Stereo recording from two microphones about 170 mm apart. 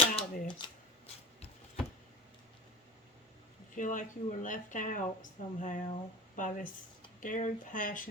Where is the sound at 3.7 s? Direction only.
50° left (ahead or behind).